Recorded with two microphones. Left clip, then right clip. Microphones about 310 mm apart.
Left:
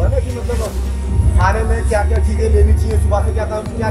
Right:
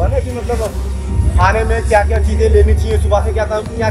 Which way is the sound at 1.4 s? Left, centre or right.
Centre.